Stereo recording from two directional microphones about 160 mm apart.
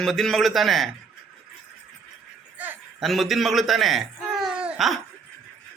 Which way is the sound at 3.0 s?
Centre (ahead or behind).